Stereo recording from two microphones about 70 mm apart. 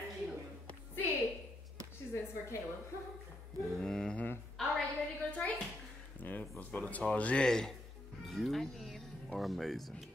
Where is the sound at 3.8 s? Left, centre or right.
Centre.